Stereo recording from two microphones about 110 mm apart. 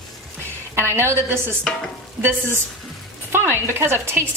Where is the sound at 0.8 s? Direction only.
25° right (ahead or behind).